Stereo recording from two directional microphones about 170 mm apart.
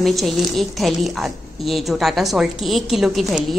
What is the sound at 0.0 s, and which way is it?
A woman's voice, centre (ahead or behind).